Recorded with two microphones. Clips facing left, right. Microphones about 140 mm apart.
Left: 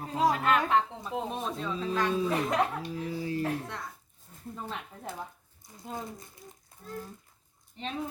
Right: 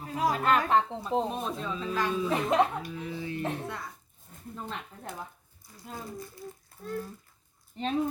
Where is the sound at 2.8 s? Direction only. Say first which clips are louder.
Left 2 dB; 35° left (ahead or behind).